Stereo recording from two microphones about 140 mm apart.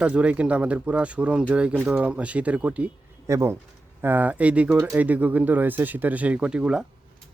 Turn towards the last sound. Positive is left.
turn(degrees=-5)  # may be behind; listen again after turning